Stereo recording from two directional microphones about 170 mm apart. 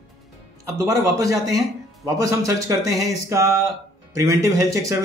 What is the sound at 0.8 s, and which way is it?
Speech, 20° right (ahead or behind).